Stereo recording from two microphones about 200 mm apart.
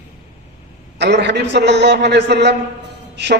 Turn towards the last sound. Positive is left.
turn(degrees=-60)  # may be behind; listen again after turning